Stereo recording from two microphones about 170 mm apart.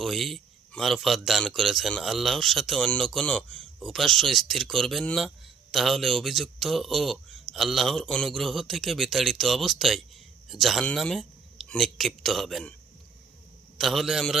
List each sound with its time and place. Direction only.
0.0 s a man's voice: centre (ahead or behind)
13.7 s a man's voice: centre (ahead or behind)